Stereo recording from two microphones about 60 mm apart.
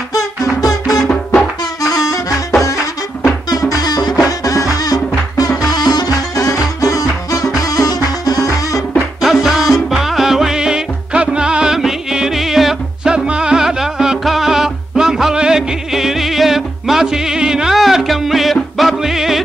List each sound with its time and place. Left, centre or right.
0.1 s music: left
3.4 s music: left
5.7 s music: left
9.2 s music: centre